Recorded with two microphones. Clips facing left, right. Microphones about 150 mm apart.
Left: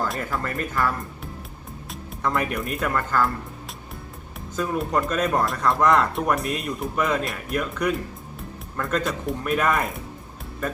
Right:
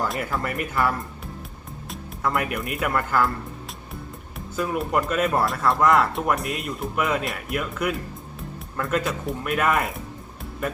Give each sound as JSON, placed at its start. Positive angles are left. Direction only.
{"t": 0.1, "sound": "speech", "side_deg": -5}
{"t": 4.5, "sound": "speech", "side_deg": -5}